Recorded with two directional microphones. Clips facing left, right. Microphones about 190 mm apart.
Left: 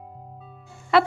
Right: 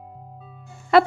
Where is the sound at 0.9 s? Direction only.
45° right (ahead or behind).